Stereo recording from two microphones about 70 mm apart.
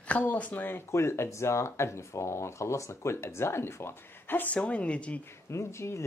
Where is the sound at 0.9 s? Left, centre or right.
Left; by 5.1 s centre.